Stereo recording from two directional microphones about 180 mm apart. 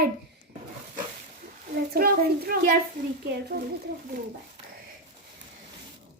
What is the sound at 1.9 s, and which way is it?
Speech, 55° right (ahead or behind).